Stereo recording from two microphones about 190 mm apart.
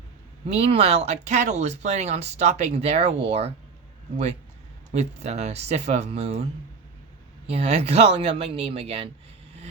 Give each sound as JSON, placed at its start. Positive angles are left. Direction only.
{"t": 0.4, "sound": "speech", "side_deg": -30}
{"t": 4.9, "sound": "speech", "side_deg": -35}
{"t": 7.5, "sound": "speech", "side_deg": -30}